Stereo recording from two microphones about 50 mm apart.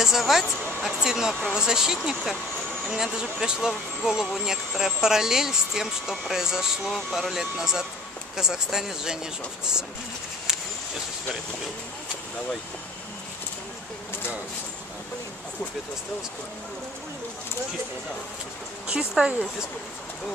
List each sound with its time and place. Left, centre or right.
0.0 s a woman's voice: centre
18.9 s speech: centre